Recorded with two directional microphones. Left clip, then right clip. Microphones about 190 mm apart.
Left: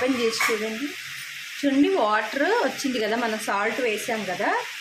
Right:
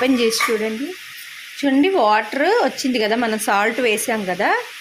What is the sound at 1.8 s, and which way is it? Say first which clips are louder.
Speech: right 6 dB; 35° right (ahead or behind).